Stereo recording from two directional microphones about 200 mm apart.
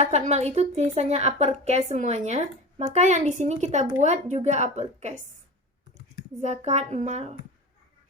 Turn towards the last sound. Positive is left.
turn(degrees=-35)  # may be behind; listen again after turning